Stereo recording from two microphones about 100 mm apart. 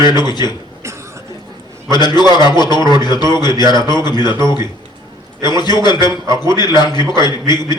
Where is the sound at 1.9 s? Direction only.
45° left (ahead or behind).